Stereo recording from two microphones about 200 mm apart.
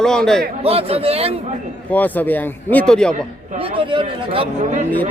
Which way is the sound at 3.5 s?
25° right (ahead or behind).